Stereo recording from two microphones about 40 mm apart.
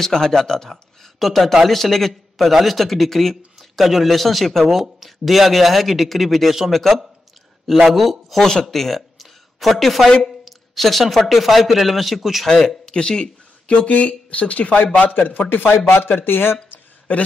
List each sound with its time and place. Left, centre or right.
0.0 s speech: centre
1.2 s speech: centre
12.4 s speech: centre
12.9 s speech: left
15.1 s speech: left
15.5 s speech: left
17.1 s a man's voice: left